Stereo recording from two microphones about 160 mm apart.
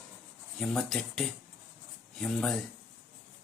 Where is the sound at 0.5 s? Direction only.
5° left (ahead or behind).